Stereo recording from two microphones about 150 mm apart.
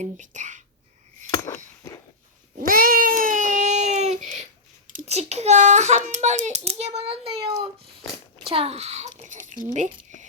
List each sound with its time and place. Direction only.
0.0 s speech: 55° right (ahead or behind)
1.3 s a sound: 20° left (ahead or behind)
2.6 s cat: 75° right (ahead or behind); by 4.1 s 50° right (ahead or behind)
4.9 s a child's voice: 45° right (ahead or behind)